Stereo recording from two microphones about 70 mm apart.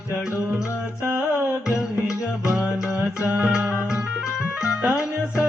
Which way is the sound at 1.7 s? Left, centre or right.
Left.